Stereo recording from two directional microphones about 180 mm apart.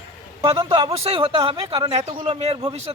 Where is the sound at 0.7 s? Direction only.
30° right (ahead or behind).